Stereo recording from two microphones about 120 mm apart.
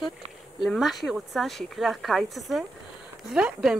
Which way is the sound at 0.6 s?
Centre (ahead or behind).